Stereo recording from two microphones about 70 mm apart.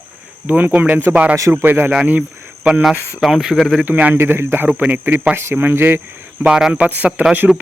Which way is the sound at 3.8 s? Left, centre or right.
Right.